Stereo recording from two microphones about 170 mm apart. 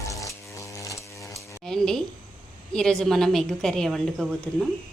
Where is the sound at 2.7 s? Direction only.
5° left (ahead or behind).